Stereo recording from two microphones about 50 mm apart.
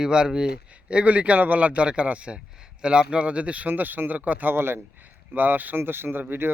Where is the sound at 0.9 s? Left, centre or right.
Right.